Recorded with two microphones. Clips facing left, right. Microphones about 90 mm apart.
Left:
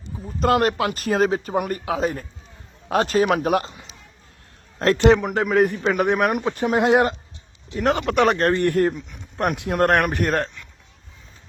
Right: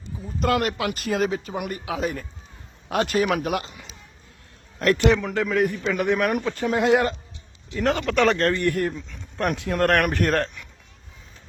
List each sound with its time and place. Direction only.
0.3 s speech: 35° left (ahead or behind)
9.0 s speech: 15° left (ahead or behind)
10.0 s a man's voice: 5° left (ahead or behind)